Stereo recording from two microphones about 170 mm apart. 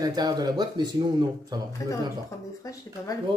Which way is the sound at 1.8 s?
20° left (ahead or behind).